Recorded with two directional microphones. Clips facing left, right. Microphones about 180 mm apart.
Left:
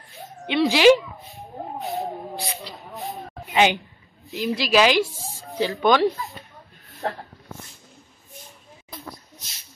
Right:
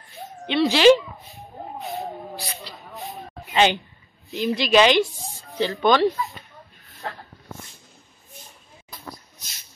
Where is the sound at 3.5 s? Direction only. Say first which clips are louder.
Even; 10° left (ahead or behind).